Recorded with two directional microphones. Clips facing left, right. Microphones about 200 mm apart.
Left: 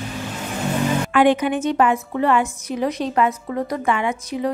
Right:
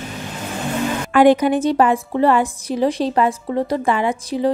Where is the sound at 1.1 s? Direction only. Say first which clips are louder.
Right 5 dB; 40° right (ahead or behind).